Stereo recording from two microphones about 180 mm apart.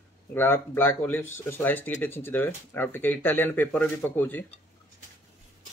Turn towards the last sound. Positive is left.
turn(degrees=10)  # may be behind; listen again after turning